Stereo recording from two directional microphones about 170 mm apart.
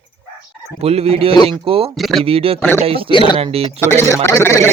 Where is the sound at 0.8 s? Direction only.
35° right (ahead or behind).